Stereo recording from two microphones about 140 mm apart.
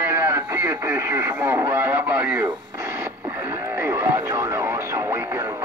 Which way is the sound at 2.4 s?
20° right (ahead or behind).